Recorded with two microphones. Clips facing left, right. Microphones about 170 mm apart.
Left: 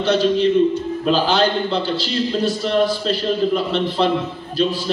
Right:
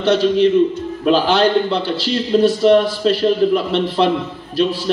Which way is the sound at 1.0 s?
65° right (ahead or behind).